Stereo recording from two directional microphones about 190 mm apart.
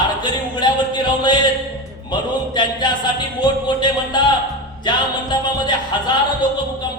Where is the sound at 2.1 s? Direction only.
25° left (ahead or behind).